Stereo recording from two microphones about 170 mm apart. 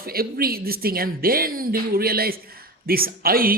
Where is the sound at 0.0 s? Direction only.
60° right (ahead or behind).